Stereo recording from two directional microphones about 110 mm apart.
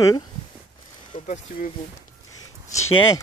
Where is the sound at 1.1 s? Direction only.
90° left.